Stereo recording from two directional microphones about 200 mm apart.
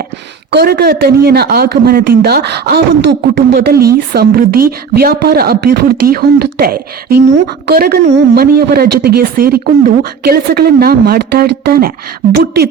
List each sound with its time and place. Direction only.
0.5 s speech: 55° right (ahead or behind)